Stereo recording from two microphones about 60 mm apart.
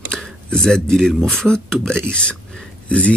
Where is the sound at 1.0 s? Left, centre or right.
Centre.